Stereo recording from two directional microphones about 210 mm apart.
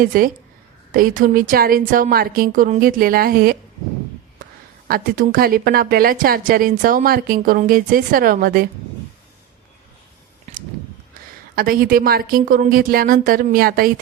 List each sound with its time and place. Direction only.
0.0 s a woman's voice: 40° right (ahead or behind)
4.9 s a woman's voice: 45° right (ahead or behind)
10.5 s a sound: 30° right (ahead or behind)
11.5 s a woman's voice: 45° right (ahead or behind)